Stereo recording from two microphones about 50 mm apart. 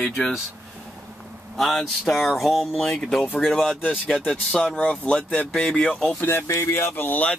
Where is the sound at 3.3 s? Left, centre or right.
Centre.